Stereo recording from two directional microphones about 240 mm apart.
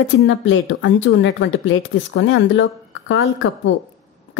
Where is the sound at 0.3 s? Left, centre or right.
Left.